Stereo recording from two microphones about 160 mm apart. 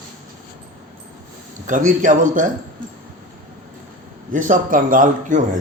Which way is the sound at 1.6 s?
55° right (ahead or behind).